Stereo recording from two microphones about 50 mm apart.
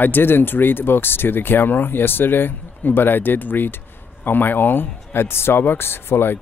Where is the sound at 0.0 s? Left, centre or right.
Left.